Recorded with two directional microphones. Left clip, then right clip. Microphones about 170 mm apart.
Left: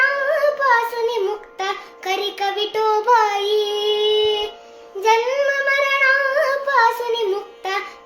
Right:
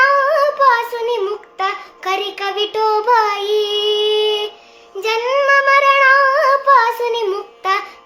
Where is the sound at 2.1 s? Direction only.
10° right (ahead or behind).